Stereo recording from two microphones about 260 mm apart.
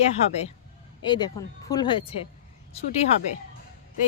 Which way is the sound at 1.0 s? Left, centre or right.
Centre.